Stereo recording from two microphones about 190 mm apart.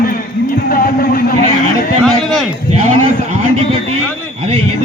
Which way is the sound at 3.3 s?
30° right (ahead or behind).